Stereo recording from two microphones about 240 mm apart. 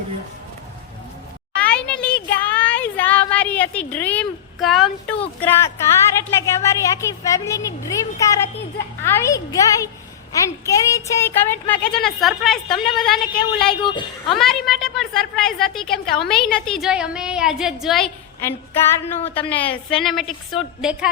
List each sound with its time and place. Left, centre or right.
1.5 s a sound: centre
5.2 s a woman's voice: centre
13.8 s a woman's voice: centre
14.3 s a woman's voice: centre
19.5 s a woman's voice: centre